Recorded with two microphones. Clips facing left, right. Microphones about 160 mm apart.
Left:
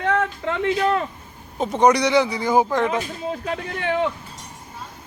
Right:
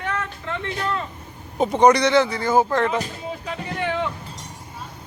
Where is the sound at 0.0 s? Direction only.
85° left.